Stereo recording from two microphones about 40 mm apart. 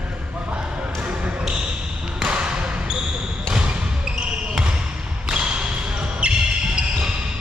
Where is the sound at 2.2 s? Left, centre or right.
Right.